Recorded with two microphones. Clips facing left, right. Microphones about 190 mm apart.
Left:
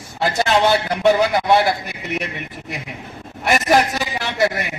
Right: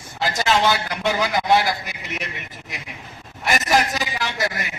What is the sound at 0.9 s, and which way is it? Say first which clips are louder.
A man's voice: left 7 dB; 60° left (ahead or behind).